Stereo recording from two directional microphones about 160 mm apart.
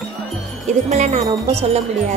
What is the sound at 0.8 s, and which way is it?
Wind chime, 45° right (ahead or behind).